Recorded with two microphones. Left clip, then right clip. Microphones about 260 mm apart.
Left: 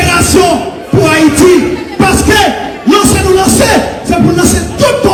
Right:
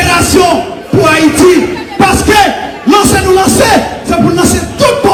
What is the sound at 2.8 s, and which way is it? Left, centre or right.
A man's voice, right.